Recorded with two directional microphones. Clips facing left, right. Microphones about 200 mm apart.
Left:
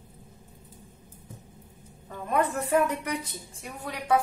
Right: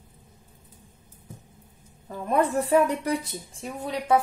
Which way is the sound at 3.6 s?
25° right (ahead or behind).